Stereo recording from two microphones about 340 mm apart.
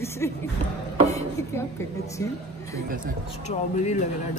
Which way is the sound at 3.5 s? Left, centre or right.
Centre.